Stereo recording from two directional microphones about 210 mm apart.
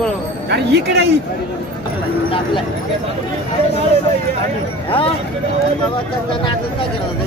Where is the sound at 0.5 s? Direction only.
55° right (ahead or behind).